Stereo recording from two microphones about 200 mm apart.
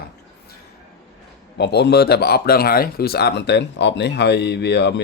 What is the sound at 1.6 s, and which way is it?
Speech, 55° left (ahead or behind).